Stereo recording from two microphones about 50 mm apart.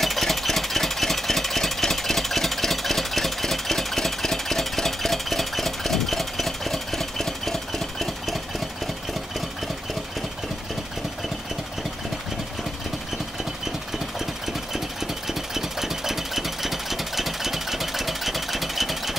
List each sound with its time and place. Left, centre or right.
0.0 s engine: centre
14.7 s engine: centre